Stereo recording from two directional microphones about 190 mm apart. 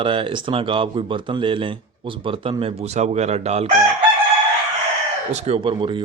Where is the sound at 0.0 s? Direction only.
25° right (ahead or behind).